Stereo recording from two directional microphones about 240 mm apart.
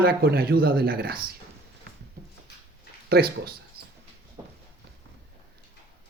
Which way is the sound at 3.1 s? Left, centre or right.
Right.